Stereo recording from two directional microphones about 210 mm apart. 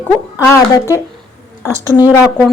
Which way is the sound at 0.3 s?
15° left (ahead or behind).